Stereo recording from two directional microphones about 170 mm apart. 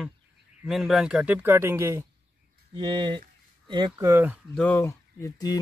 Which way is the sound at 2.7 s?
25° right (ahead or behind).